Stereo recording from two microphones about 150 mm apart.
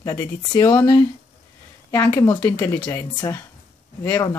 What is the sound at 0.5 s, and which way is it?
Speech, 30° left (ahead or behind).